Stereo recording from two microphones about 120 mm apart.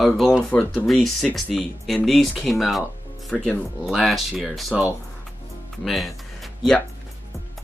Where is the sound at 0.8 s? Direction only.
Centre (ahead or behind).